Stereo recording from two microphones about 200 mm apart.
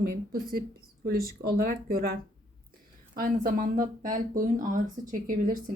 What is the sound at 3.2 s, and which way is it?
Speech, 45° right (ahead or behind).